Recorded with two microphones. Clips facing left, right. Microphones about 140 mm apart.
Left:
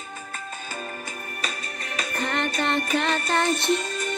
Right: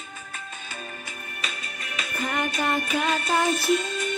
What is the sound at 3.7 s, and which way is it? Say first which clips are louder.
Music: right 1 dB; 40° left (ahead or behind).